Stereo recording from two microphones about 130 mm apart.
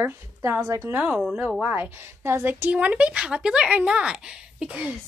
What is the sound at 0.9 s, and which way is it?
A woman's voice, 5° right (ahead or behind).